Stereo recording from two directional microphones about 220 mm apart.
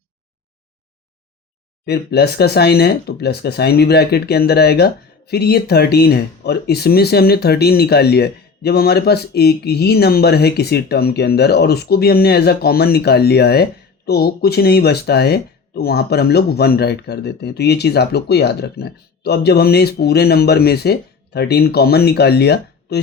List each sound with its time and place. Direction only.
1.9 s speech: 45° left (ahead or behind)